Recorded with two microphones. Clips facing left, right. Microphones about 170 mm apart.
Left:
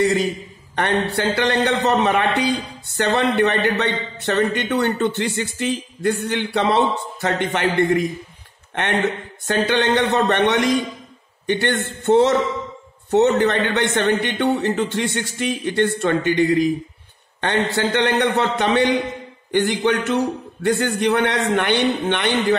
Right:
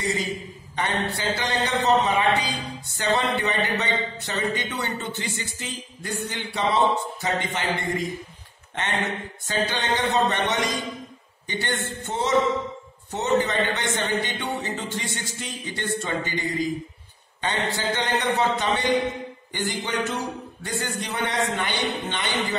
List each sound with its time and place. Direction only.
0.7 s a man's voice: 65° left (ahead or behind)
9.5 s a man's voice: 65° left (ahead or behind)